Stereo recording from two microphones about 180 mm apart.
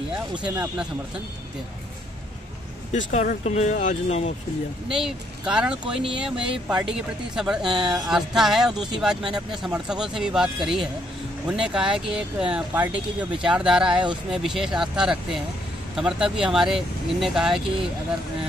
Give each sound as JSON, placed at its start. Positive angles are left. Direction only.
{"t": 0.4, "sound": "speech", "side_deg": -5}
{"t": 2.9, "sound": "speech", "side_deg": 40}
{"t": 4.8, "sound": "speech", "side_deg": -5}